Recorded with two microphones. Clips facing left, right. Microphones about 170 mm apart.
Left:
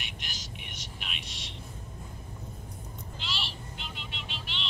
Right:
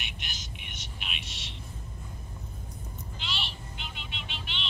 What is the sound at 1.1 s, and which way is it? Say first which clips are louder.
Vehicle: even; 35° left (ahead or behind).